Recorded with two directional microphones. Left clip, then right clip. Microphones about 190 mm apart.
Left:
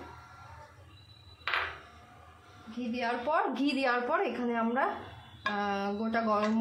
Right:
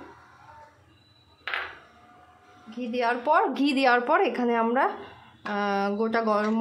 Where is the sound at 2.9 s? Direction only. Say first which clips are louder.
Right 8 dB; 35° right (ahead or behind).